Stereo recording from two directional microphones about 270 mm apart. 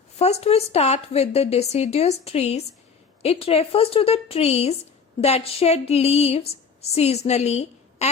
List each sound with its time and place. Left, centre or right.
0.2 s a woman's voice: left